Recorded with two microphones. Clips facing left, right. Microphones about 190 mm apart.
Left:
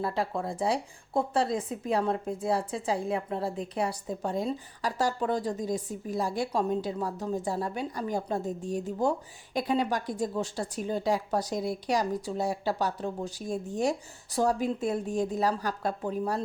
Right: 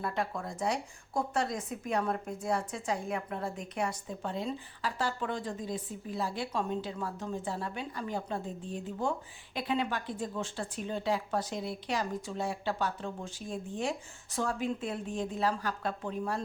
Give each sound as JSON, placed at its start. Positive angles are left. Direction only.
{"t": 0.0, "sound": "a woman's voice", "side_deg": 30}